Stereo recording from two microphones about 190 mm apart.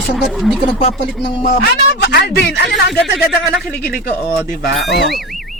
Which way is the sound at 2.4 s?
65° left (ahead or behind).